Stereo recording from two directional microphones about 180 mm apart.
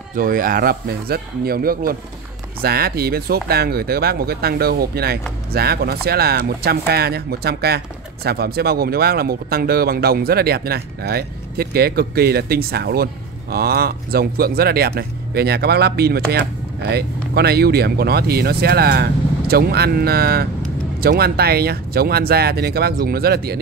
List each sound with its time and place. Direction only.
0.1 s speech: 50° right (ahead or behind)